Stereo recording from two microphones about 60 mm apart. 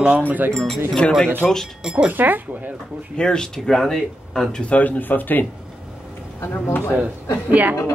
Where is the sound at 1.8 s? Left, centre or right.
Centre.